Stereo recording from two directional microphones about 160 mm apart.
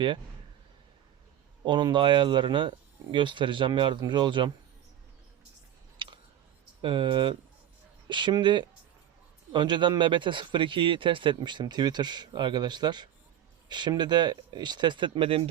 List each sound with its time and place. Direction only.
1.6 s speech: 30° right (ahead or behind)
6.0 s a sound: 30° right (ahead or behind)
6.8 s a man's voice: 30° right (ahead or behind)